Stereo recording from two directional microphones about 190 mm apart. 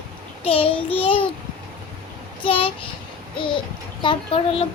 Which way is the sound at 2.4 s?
30° left (ahead or behind).